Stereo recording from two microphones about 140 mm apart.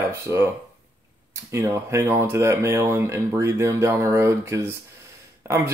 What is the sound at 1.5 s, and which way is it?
Speech, 20° right (ahead or behind).